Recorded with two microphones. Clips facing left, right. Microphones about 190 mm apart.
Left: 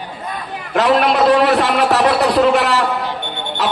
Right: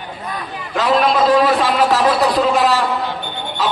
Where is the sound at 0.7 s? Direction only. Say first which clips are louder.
Left 2 dB; 65° left (ahead or behind).